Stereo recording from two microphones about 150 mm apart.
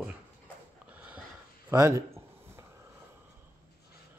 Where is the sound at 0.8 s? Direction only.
10° right (ahead or behind).